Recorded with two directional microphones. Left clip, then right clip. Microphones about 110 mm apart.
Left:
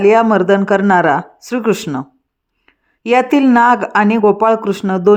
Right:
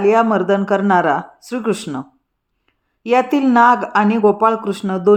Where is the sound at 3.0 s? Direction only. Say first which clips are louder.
Left 3 dB; 45° left (ahead or behind).